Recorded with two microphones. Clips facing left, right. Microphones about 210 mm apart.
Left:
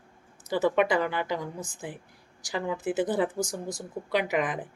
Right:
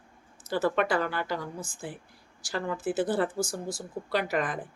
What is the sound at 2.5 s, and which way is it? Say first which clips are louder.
Speech: left 1 dB; 15° left (ahead or behind).